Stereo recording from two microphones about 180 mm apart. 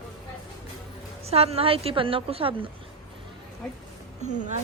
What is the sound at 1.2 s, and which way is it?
A woman's voice, 35° right (ahead or behind).